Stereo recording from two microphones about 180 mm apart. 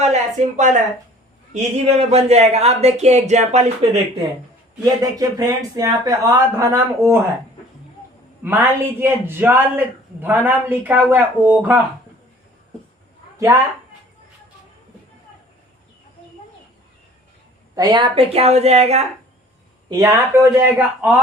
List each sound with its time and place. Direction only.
0.0 s speech: 40° right (ahead or behind)
5.2 s a man's voice: 20° right (ahead or behind)
8.4 s a man's voice: 10° right (ahead or behind)
13.5 s a man's voice: 15° right (ahead or behind)
17.7 s speech: 25° right (ahead or behind)
19.9 s a man's voice: 20° right (ahead or behind)